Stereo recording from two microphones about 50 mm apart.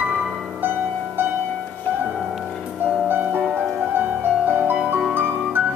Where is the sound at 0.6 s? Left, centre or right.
Right.